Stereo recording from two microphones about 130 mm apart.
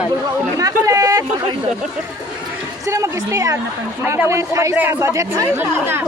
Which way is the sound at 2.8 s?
25° right (ahead or behind).